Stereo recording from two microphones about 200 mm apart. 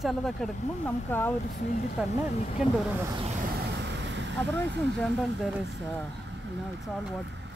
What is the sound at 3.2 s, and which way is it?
Vehicle, 40° right (ahead or behind).